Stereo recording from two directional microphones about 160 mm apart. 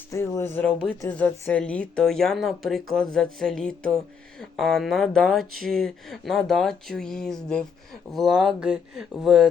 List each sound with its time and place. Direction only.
0.1 s speech: 20° left (ahead or behind); by 9.5 s 5° right (ahead or behind)